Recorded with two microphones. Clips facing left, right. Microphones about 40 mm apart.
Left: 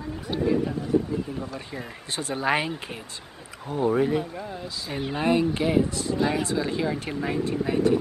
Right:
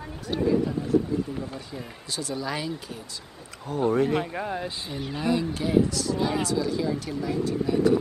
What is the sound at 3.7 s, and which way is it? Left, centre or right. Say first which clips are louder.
Speech: even; centre.